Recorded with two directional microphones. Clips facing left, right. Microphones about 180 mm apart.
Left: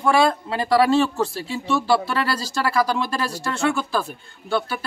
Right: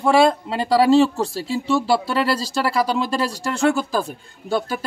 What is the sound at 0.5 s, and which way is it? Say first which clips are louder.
A man's voice: right 3 dB; 30° right (ahead or behind).